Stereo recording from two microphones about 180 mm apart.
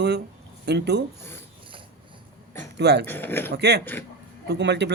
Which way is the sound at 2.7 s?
70° right (ahead or behind).